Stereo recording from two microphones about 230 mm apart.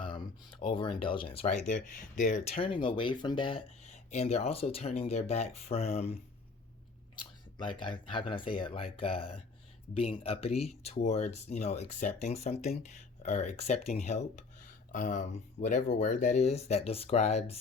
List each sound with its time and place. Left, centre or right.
0.0 s speech: centre
7.2 s speech: centre